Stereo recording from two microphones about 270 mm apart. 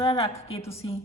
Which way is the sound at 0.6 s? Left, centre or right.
Centre.